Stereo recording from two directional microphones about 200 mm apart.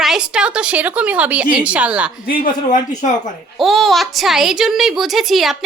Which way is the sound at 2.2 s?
45° left (ahead or behind).